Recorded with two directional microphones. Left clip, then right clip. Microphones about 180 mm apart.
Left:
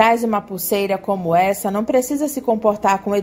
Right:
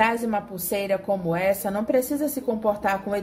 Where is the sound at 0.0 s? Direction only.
35° left (ahead or behind).